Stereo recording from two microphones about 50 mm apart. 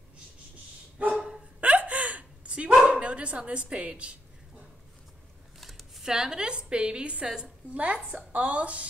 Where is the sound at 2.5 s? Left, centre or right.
Right.